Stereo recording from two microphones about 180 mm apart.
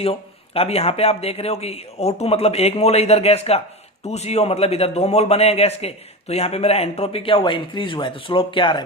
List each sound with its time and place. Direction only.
0.0 s a man's voice: 30° left (ahead or behind)